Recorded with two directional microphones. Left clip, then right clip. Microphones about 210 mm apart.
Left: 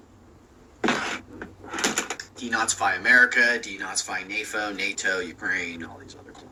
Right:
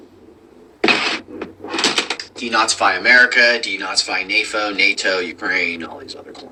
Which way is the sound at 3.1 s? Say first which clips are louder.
Right 5 dB; 5° left (ahead or behind).